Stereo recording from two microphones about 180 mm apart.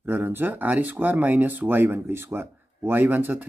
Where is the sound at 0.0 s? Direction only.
10° right (ahead or behind).